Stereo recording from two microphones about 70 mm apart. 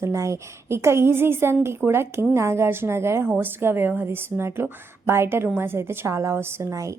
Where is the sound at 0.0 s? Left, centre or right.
Right.